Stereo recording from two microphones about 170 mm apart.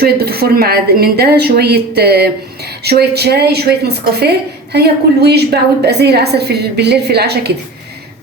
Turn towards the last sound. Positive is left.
turn(degrees=-75)  # may be behind; listen again after turning